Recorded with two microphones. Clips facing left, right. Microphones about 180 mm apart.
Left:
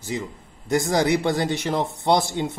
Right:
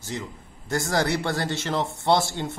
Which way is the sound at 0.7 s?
15° left (ahead or behind).